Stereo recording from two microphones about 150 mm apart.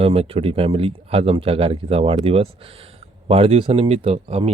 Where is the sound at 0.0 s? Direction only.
40° right (ahead or behind).